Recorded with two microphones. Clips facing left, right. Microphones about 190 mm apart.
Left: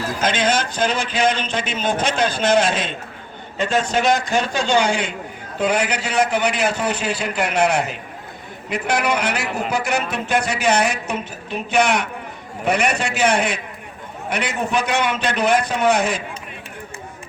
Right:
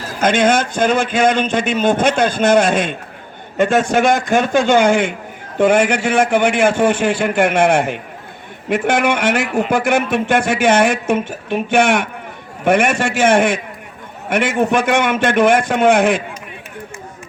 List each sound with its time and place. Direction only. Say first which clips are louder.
0.2 s a man's voice: right 7 dB; 50° right (ahead or behind)